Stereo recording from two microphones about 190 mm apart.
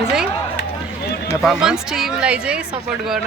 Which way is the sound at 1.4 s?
5° right (ahead or behind).